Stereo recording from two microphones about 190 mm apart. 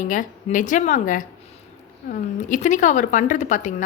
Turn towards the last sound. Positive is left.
turn(degrees=40)  # may be behind; listen again after turning